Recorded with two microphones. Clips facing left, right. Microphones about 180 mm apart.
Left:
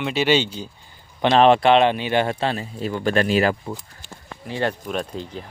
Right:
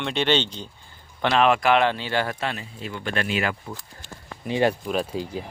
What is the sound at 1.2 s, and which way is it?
Speech, 30° left (ahead or behind).